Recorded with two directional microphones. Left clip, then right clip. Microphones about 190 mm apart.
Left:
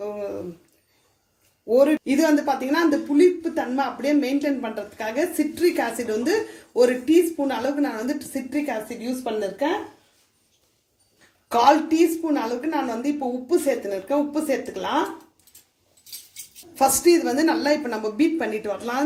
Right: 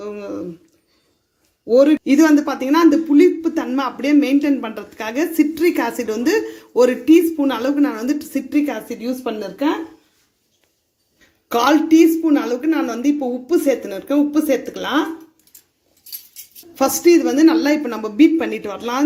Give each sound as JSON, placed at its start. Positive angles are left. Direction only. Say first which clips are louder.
{"t": 1.6, "sound": "a woman's voice", "louder": "right 5 dB", "side_deg": -40}
{"t": 11.5, "sound": "a woman's voice", "louder": "right 4 dB", "side_deg": -40}
{"t": 17.1, "sound": "a woman's voice", "louder": "right 10 dB", "side_deg": -35}